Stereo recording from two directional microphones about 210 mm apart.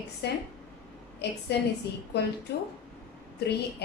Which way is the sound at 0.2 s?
55° left (ahead or behind).